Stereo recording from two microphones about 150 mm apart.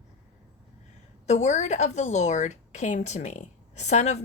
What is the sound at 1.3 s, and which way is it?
A woman's voice, 50° left (ahead or behind).